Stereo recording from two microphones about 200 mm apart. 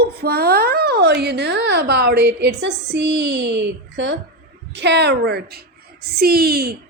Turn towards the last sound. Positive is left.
turn(degrees=-50)  # may be behind; listen again after turning